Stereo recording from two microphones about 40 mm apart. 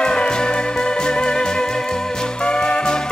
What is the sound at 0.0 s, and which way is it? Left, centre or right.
Music, left.